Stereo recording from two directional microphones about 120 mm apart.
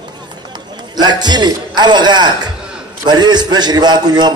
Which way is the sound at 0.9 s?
35° right (ahead or behind).